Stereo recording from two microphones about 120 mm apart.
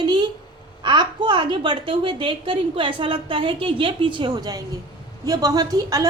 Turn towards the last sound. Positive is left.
turn(degrees=-30)  # may be behind; listen again after turning